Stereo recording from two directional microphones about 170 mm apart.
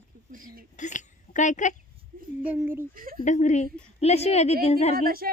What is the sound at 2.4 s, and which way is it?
Speech, 10° right (ahead or behind).